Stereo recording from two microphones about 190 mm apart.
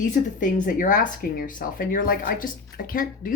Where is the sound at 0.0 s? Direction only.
40° left (ahead or behind).